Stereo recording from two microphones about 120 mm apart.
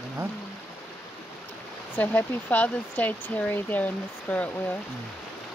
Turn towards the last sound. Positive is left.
turn(degrees=10)  # may be behind; listen again after turning